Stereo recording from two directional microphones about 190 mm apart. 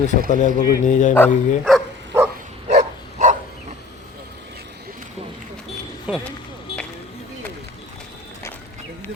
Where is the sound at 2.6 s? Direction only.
40° right (ahead or behind).